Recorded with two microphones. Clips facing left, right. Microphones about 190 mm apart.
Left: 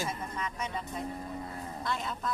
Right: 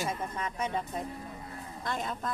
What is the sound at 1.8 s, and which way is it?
Speech, 50° right (ahead or behind).